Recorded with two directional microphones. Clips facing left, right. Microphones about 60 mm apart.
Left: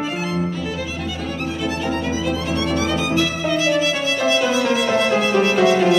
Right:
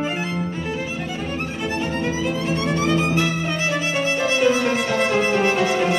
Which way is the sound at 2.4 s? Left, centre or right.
Right.